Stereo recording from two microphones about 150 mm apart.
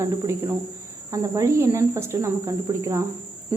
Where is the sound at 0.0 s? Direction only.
20° right (ahead or behind).